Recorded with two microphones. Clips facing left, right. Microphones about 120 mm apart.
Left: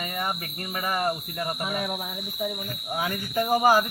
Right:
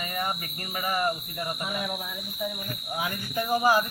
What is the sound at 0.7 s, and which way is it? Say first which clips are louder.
Speech: left 1 dB; 45° left (ahead or behind).